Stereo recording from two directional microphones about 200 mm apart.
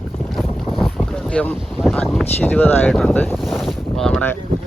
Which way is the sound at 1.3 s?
5° left (ahead or behind).